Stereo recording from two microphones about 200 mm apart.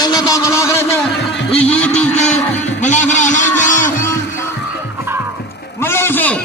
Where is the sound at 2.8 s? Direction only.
35° left (ahead or behind).